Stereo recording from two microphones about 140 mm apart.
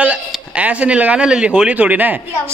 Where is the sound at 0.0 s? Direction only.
10° right (ahead or behind).